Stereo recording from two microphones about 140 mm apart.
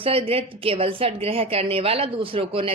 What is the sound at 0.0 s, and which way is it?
A woman's voice, 40° right (ahead or behind).